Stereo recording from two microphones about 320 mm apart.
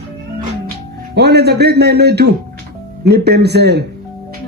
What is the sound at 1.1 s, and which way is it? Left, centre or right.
A man's voice, right.